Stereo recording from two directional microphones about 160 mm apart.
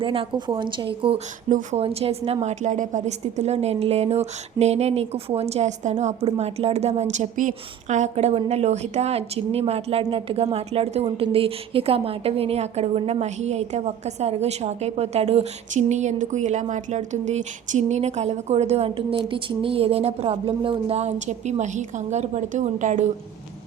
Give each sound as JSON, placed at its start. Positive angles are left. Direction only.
{"t": 0.0, "sound": "a woman's voice", "side_deg": -35}
{"t": 1.5, "sound": "a woman's voice", "side_deg": -55}
{"t": 1.8, "sound": "a woman's voice", "side_deg": -40}